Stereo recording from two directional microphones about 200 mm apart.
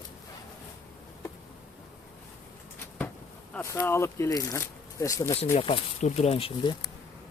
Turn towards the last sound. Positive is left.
turn(degrees=25)  # may be behind; listen again after turning